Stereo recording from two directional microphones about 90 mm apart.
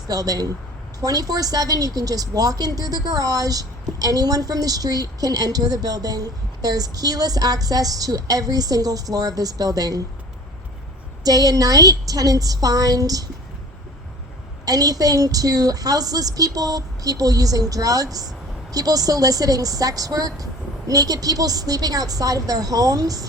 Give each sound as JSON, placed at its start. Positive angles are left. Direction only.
{"t": 0.1, "sound": "a woman's voice", "side_deg": -45}
{"t": 11.2, "sound": "a woman's voice", "side_deg": -45}
{"t": 14.6, "sound": "a woman's voice", "side_deg": -45}